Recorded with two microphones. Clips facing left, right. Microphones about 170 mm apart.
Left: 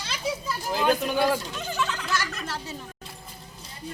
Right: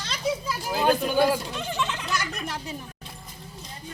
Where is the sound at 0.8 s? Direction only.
5° right (ahead or behind).